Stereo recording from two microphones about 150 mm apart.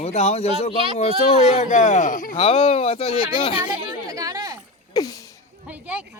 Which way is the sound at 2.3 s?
40° left (ahead or behind).